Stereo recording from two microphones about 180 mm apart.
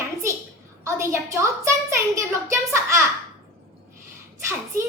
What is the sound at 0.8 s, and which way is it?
A woman's voice, 15° right (ahead or behind).